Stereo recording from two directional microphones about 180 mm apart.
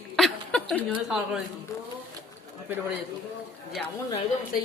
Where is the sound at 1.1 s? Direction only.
5° right (ahead or behind).